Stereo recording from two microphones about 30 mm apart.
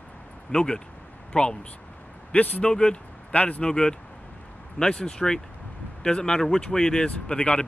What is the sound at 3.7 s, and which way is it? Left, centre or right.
Speech, left.